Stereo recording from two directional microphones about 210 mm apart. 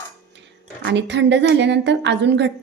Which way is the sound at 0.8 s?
55° right (ahead or behind).